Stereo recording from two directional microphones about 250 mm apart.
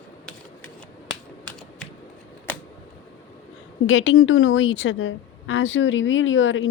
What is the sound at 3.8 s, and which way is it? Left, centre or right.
A woman's voice, left.